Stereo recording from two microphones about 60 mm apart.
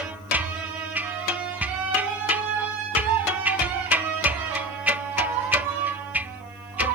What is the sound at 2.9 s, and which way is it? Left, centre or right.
Tabla, right.